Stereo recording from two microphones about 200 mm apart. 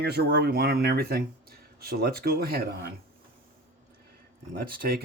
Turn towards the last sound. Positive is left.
turn(degrees=-50)  # may be behind; listen again after turning